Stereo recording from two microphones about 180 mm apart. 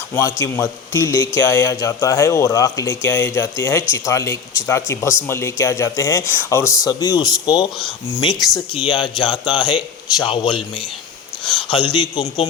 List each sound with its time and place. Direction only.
0.1 s a man's voice: 15° left (ahead or behind)